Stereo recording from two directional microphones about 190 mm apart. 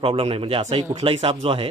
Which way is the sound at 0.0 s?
30° right (ahead or behind).